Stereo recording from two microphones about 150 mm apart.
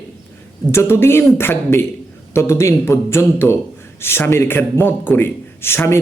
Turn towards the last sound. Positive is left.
turn(degrees=15)  # may be behind; listen again after turning